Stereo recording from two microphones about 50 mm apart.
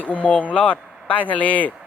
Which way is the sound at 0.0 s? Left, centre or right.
Left.